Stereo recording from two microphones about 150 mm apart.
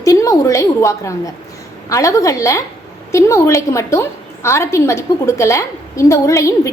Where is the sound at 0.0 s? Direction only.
20° left (ahead or behind).